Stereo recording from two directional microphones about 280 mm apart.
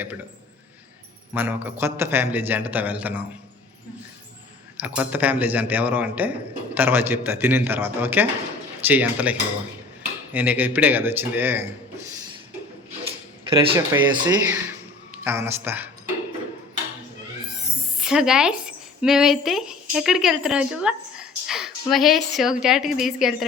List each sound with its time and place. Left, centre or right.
1.3 s a man's voice: centre
4.8 s a man's voice: centre
13.5 s a man's voice: centre
18.0 s speech: centre